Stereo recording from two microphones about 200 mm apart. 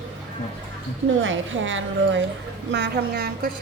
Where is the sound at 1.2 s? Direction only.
70° right (ahead or behind).